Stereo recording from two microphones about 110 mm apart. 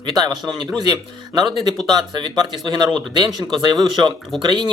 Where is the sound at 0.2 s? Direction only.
40° right (ahead or behind).